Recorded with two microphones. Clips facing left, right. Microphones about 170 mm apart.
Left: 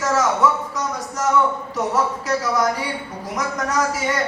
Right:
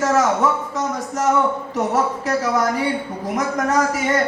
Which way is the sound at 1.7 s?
50° right (ahead or behind).